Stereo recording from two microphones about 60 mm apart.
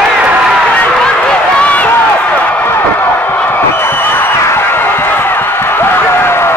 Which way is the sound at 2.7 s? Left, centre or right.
Left.